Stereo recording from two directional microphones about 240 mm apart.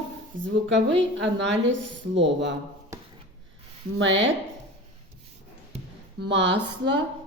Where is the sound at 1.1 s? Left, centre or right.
Right.